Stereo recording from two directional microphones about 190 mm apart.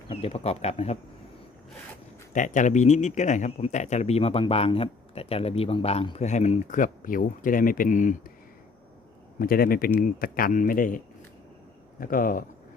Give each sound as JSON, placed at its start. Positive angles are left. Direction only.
{"t": 0.1, "sound": "speech", "side_deg": 30}
{"t": 2.3, "sound": "speech", "side_deg": 40}
{"t": 9.4, "sound": "speech", "side_deg": 50}